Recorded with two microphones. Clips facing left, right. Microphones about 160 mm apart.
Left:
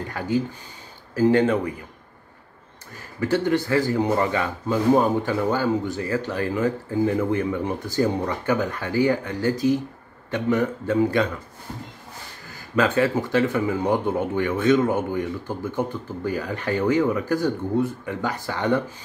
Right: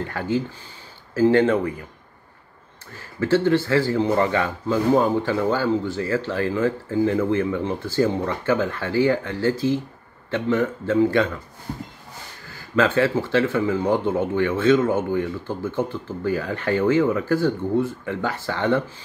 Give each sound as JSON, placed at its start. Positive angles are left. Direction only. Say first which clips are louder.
{"t": 0.0, "sound": "speech", "louder": "even", "side_deg": 15}
{"t": 3.2, "sound": "speech", "louder": "right 3 dB", "side_deg": 15}
{"t": 12.7, "sound": "speech", "louder": "right 1 dB", "side_deg": 15}